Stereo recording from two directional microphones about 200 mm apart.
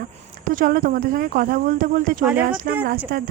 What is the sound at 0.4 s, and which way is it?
Speech, 45° right (ahead or behind).